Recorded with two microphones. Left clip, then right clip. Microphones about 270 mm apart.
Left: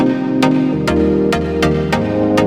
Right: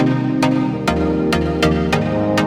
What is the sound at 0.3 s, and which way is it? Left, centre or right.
Music, left.